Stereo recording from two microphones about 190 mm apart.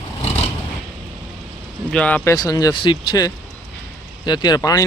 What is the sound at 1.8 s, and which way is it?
Speech, 5° left (ahead or behind).